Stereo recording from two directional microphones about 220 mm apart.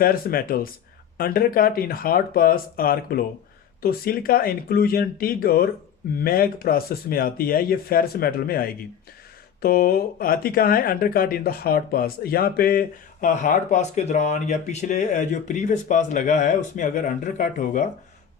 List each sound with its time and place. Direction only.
0.0 s speech: 40° left (ahead or behind)